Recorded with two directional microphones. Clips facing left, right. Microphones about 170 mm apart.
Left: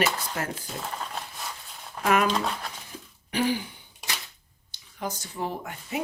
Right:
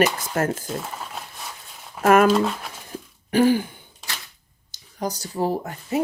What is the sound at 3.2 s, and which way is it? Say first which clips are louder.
Throat clearing: right 9 dB; 45° right (ahead or behind).